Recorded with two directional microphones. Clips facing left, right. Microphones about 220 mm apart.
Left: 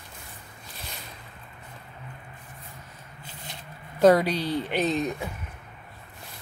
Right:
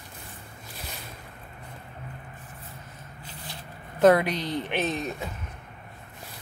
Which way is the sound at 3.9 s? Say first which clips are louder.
Left 1 dB; 10° left (ahead or behind).